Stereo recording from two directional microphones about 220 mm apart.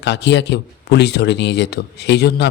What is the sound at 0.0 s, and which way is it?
Speech, 50° left (ahead or behind).